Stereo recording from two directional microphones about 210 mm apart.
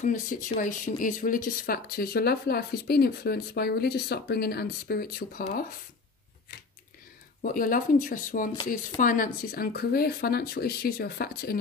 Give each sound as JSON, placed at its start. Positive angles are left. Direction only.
{"t": 0.0, "sound": "speech", "side_deg": 40}
{"t": 7.4, "sound": "speech", "side_deg": 40}